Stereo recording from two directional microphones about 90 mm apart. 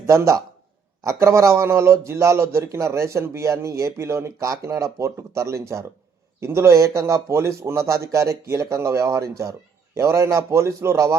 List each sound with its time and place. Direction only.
0.0 s a man's voice: 35° right (ahead or behind)